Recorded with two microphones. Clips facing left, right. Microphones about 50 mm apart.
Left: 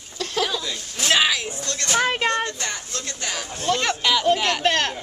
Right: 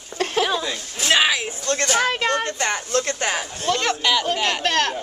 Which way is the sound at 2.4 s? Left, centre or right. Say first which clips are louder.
Right 6 dB; right.